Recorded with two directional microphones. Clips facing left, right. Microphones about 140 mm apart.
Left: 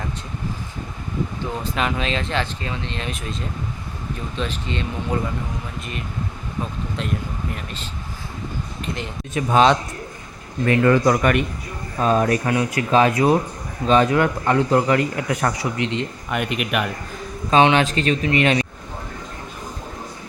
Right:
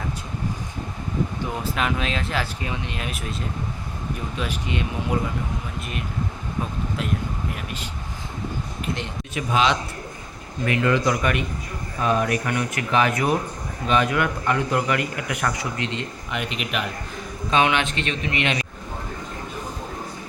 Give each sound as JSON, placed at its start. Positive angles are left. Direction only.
{"t": 1.6, "sound": "speech", "side_deg": -5}
{"t": 4.4, "sound": "speech", "side_deg": -10}
{"t": 7.5, "sound": "speech", "side_deg": -10}
{"t": 8.8, "sound": "a sound", "side_deg": 0}
{"t": 9.3, "sound": "speech", "side_deg": 45}
{"t": 11.9, "sound": "speech", "side_deg": 35}
{"t": 16.3, "sound": "speech", "side_deg": 55}
{"t": 17.5, "sound": "speech", "side_deg": 30}